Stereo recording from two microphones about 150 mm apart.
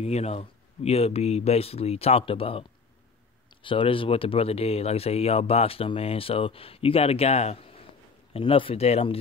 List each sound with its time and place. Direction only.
0.0 s speech: 45° left (ahead or behind)